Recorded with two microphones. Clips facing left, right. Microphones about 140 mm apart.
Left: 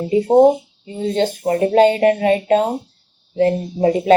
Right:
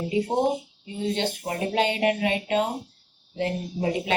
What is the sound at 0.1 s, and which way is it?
Speech, 40° left (ahead or behind).